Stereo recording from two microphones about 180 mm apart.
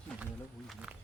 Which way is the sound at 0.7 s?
5° right (ahead or behind).